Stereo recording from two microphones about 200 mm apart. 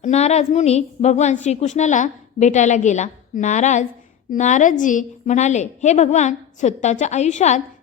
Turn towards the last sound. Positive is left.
turn(degrees=35)  # may be behind; listen again after turning